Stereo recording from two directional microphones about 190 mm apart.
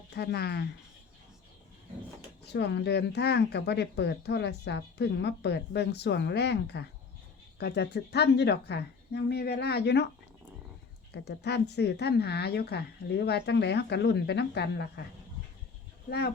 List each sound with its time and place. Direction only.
0.1 s speech: 60° left (ahead or behind)
2.4 s speech: 60° left (ahead or behind)
11.1 s speech: 60° left (ahead or behind)
16.0 s speech: 55° left (ahead or behind)